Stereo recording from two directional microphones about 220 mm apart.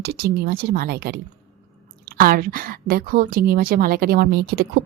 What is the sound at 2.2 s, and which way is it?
A woman's voice, 40° right (ahead or behind).